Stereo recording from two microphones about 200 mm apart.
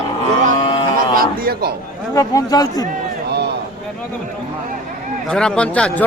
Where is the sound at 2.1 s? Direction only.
15° left (ahead or behind).